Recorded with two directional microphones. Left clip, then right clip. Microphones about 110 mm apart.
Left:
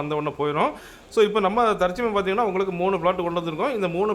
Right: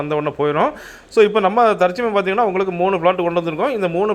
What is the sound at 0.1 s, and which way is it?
A man's voice, 25° right (ahead or behind).